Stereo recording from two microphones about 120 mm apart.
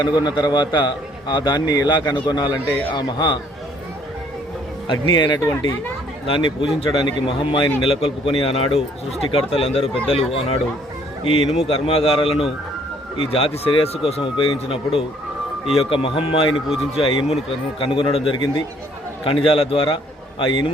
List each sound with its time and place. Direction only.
0.2 s a man's voice: 35° left (ahead or behind)
4.9 s a man's voice: 40° left (ahead or behind)
5.4 s speech: 20° left (ahead or behind)
6.2 s a man's voice: 45° left (ahead or behind)
16.6 s speech: 5° right (ahead or behind)
17.0 s a man's voice: 50° left (ahead or behind)